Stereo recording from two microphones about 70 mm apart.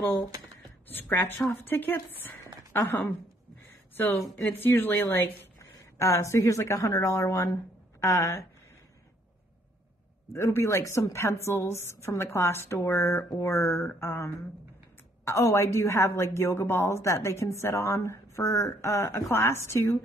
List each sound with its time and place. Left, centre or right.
1.5 s a woman's voice: left
5.9 s a woman's voice: left
10.3 s a woman's voice: left